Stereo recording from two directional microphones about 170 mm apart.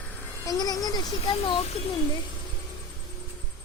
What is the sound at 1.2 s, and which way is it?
Speech, 30° left (ahead or behind).